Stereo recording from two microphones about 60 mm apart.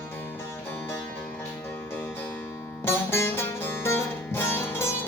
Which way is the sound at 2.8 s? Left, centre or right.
Left.